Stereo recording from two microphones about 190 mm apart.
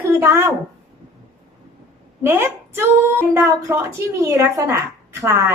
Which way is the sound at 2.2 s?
10° right (ahead or behind).